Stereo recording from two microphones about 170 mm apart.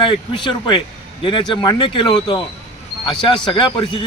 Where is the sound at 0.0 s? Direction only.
30° left (ahead or behind).